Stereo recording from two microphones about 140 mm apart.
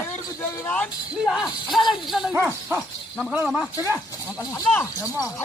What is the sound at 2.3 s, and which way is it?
Speech, 15° right (ahead or behind).